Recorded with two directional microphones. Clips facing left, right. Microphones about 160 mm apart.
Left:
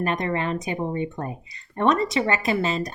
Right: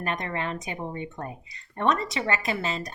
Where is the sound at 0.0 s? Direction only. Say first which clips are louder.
Left 6 dB; 30° left (ahead or behind).